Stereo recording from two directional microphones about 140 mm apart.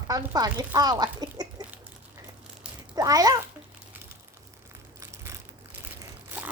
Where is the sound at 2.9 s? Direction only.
25° right (ahead or behind).